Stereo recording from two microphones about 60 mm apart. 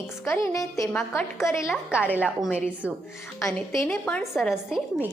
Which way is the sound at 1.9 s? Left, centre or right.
Right.